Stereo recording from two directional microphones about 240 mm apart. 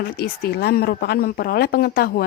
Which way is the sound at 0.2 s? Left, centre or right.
Left.